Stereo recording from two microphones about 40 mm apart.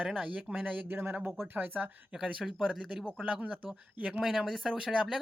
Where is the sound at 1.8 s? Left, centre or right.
Right.